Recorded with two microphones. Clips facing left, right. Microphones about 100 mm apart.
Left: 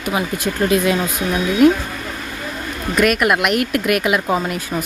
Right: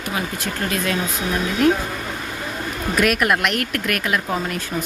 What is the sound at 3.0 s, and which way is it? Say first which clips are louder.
Speech: left 3 dB; 5° left (ahead or behind).